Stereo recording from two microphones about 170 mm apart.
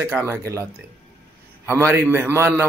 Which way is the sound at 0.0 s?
15° right (ahead or behind).